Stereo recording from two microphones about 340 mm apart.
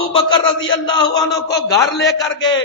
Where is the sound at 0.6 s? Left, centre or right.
Centre.